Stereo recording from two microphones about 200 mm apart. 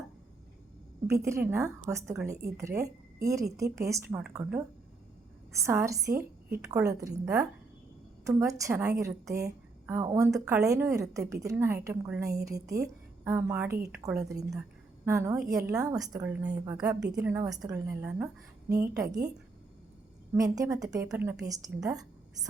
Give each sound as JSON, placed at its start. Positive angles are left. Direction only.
{"t": 1.0, "sound": "a woman's voice", "side_deg": -15}
{"t": 5.6, "sound": "a woman's voice", "side_deg": -15}
{"t": 8.3, "sound": "a woman's voice", "side_deg": -15}
{"t": 13.7, "sound": "a woman's voice", "side_deg": -50}
{"t": 14.0, "sound": "a woman's voice", "side_deg": -10}
{"t": 20.3, "sound": "a woman's voice", "side_deg": -15}